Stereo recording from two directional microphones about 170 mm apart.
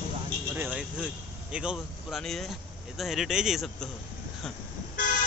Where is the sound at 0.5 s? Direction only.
10° right (ahead or behind).